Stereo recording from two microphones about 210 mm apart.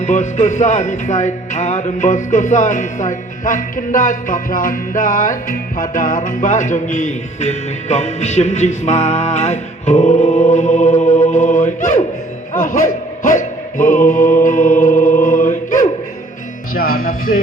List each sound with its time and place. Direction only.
0.0 s music: 35° left (ahead or behind)
12.5 s speech: 40° left (ahead or behind)
13.7 s music: 40° left (ahead or behind)
16.7 s speech: 90° left
17.0 s music: 40° left (ahead or behind)